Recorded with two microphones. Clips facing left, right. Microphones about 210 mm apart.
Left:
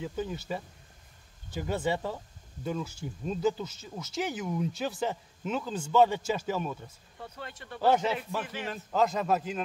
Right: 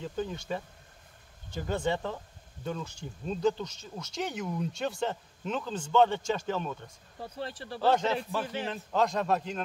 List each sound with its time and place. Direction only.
0.0 s speech: 10° left (ahead or behind)
7.2 s speech: 30° right (ahead or behind)
7.8 s speech: 10° left (ahead or behind)